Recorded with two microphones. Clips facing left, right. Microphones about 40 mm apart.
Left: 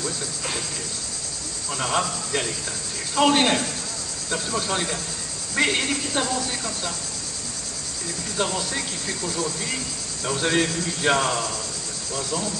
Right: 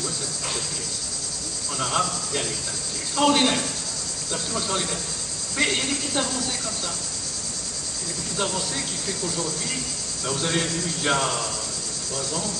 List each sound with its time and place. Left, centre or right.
1.8 s speech: centre
8.4 s speech: centre
10.4 s speech: centre